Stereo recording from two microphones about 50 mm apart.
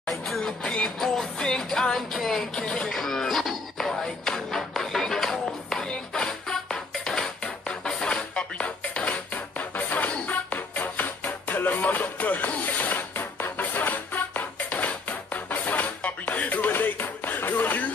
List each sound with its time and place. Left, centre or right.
0.1 s music: centre
0.7 s music: centre
0.9 s music: centre
2.5 s a sound: centre
2.9 s a sound: centre
3.9 s music: centre; by 17.9 s left